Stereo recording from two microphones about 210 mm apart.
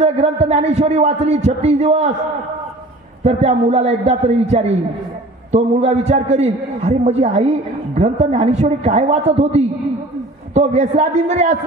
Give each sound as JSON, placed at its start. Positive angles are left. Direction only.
{"t": 0.0, "sound": "a man's voice", "side_deg": -30}
{"t": 3.3, "sound": "a man's voice", "side_deg": -30}